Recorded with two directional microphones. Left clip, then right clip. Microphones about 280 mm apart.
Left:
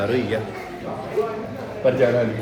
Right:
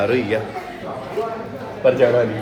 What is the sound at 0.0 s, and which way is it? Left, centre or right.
Speech, centre.